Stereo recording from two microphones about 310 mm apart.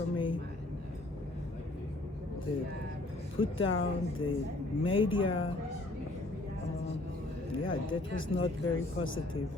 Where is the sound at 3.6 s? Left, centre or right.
Left.